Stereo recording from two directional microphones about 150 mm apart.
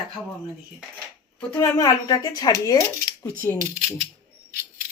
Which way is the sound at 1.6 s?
25° left (ahead or behind).